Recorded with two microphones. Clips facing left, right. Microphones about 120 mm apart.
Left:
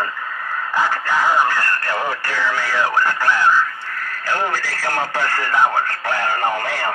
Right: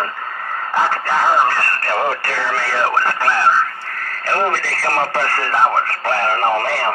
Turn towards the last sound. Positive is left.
turn(degrees=-40)  # may be behind; listen again after turning